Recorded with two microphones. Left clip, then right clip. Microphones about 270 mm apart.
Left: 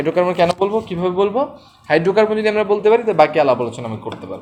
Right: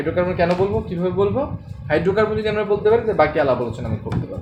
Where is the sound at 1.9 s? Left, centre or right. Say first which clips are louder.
Left 4 dB; left.